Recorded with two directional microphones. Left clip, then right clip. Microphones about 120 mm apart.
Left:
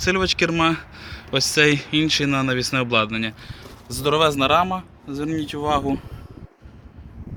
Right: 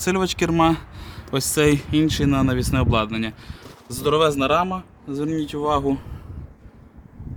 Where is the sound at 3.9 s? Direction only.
20° right (ahead or behind).